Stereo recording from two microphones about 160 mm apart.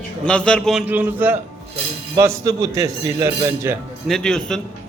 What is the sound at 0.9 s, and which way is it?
A man's voice, 10° right (ahead or behind).